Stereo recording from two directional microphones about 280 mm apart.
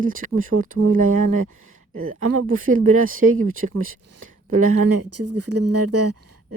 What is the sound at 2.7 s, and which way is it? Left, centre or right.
Speech, right.